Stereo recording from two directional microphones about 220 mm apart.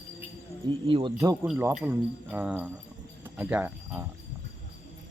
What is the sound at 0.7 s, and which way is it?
Speech, 25° right (ahead or behind).